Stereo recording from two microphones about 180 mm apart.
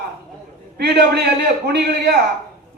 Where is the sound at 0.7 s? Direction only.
65° right (ahead or behind).